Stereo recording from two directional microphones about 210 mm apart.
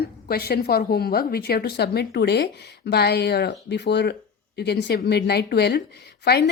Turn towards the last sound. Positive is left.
turn(degrees=50)  # may be behind; listen again after turning